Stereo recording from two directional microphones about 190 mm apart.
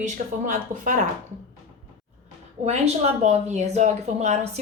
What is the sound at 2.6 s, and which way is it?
A woman's voice, 35° right (ahead or behind).